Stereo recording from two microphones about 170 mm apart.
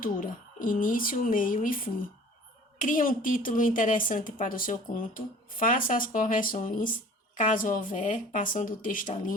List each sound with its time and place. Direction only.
0.0 s a woman's voice: 55° left (ahead or behind)